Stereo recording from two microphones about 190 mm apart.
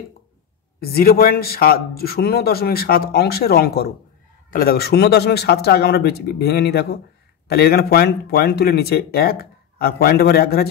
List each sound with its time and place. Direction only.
0.7 s speech: 55° left (ahead or behind)